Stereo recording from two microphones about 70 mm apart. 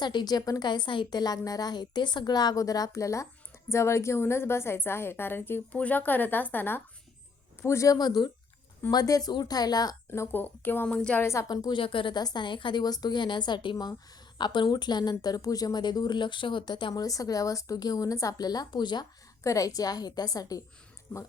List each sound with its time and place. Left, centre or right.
0.0 s a woman's voice: left
7.9 s a woman's voice: left
8.9 s speech: left
10.1 s a woman's voice: left
10.8 s a woman's voice: centre
11.2 s a woman's voice: left
11.4 s speech: left
12.1 s a woman's voice: left
15.2 s speech: left
19.4 s a woman's voice: left